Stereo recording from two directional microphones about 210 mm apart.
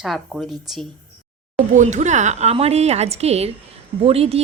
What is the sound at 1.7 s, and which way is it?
A woman's voice, 35° right (ahead or behind).